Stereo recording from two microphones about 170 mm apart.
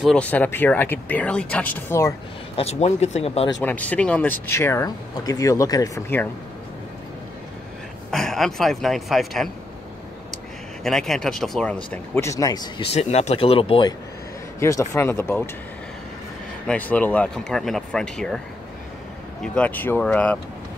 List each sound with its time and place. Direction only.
0.0 s speech: 5° left (ahead or behind)
2.5 s speech: 40° left (ahead or behind)
3.6 s speech: 10° left (ahead or behind)
8.1 s speech: centre (ahead or behind)
10.8 s speech: centre (ahead or behind)
12.2 s speech: 20° left (ahead or behind)
12.9 s speech: 40° left (ahead or behind)
14.6 s speech: 15° left (ahead or behind)
16.6 s speech: 10° left (ahead or behind)
19.4 s speech: 5° left (ahead or behind)